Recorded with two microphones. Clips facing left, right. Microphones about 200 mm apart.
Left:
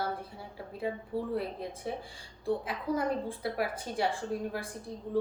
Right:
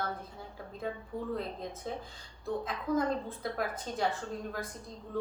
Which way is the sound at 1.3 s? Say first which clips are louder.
Left 3 dB; 10° left (ahead or behind).